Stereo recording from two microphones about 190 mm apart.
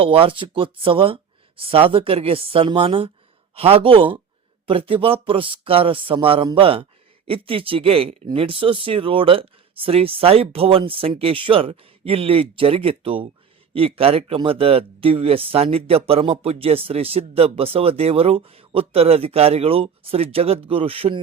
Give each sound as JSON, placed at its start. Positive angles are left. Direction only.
{"t": 0.0, "sound": "speech", "side_deg": -30}